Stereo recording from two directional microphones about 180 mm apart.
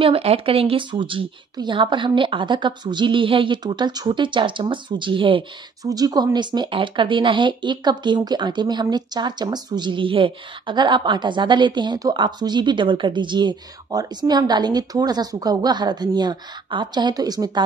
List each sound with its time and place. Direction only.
0.0 s speech: 30° right (ahead or behind)